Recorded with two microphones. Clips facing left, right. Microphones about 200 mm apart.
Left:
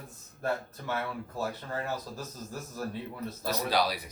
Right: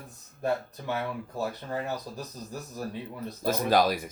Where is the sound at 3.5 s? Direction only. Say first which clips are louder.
Right 5 dB; 50° right (ahead or behind).